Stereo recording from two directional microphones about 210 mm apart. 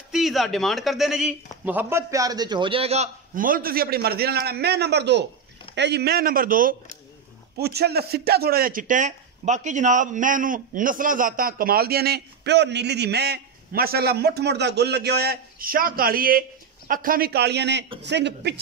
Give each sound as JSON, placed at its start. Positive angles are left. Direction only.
{"t": 0.1, "sound": "a man's voice", "side_deg": 0}